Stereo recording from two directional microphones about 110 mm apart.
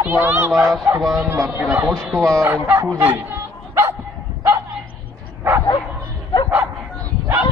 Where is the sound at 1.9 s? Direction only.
5° left (ahead or behind).